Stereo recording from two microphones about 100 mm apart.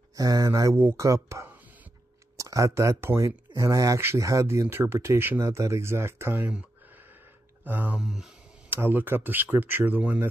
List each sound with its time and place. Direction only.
0.1 s speech: 35° right (ahead or behind)
7.6 s speech: 15° right (ahead or behind)
8.0 s speech: 5° right (ahead or behind)
8.6 s speech: 20° right (ahead or behind)